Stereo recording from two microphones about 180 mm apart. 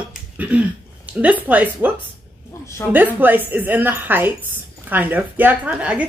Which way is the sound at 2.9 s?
10° right (ahead or behind).